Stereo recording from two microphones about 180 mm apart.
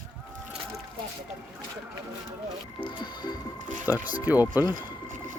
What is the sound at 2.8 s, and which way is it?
Music, 25° left (ahead or behind).